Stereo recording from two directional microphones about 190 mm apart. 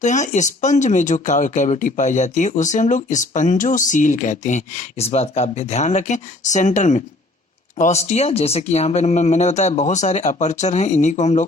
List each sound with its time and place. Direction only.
0.0 s speech: 40° left (ahead or behind)